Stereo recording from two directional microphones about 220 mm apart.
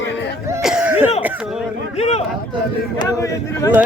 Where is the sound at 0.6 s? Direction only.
5° right (ahead or behind).